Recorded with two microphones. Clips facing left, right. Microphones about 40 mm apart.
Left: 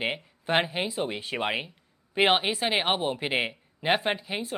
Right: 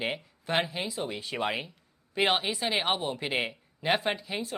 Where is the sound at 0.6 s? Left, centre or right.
Left.